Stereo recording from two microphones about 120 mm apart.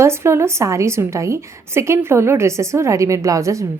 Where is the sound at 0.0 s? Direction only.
20° right (ahead or behind).